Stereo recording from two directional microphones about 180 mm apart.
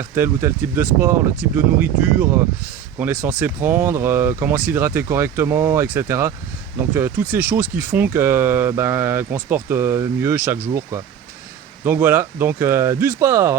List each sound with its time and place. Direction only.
0.1 s speech: 15° right (ahead or behind)